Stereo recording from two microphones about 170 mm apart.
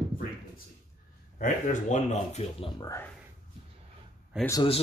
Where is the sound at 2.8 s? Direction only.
15° left (ahead or behind).